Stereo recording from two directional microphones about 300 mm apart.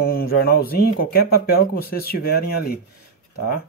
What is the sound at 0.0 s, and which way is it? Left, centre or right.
Speech, left.